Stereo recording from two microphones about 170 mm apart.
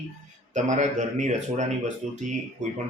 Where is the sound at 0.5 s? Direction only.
45° right (ahead or behind).